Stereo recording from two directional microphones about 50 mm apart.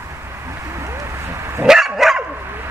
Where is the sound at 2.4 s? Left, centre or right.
Right.